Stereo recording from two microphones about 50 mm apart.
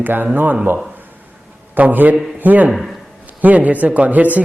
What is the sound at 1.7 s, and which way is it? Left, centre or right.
A man's voice, right.